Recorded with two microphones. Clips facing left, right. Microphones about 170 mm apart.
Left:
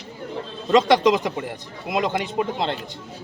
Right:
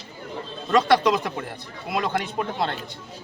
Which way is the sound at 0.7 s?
20° left (ahead or behind).